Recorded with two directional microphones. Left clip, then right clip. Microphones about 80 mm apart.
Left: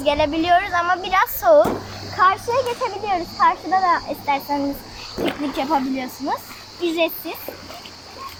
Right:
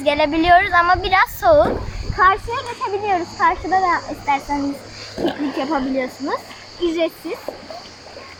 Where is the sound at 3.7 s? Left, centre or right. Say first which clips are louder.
Right 1 dB; centre.